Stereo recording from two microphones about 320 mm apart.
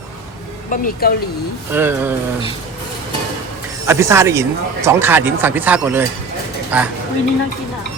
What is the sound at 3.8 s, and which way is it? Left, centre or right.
Speech, centre.